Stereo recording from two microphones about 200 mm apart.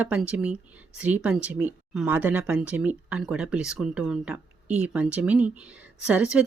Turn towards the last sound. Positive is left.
turn(degrees=-5)  # may be behind; listen again after turning